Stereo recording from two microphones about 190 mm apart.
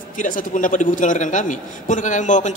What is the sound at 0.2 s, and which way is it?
A man's voice, 45° left (ahead or behind).